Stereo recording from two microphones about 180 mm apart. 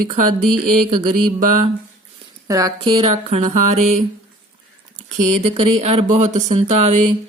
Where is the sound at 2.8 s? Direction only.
30° right (ahead or behind).